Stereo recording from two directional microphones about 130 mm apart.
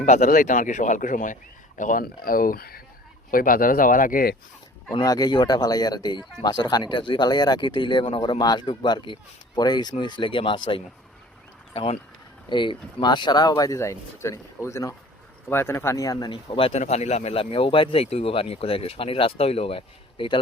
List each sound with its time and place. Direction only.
0.0 s speech: 85° left
4.9 s speech: 30° left (ahead or behind); by 11.9 s 50° left (ahead or behind)
12.5 s speech: 35° left (ahead or behind)
16.3 s speech: 40° left (ahead or behind)
16.7 s speech: 60° left (ahead or behind); by 20.4 s 40° left (ahead or behind)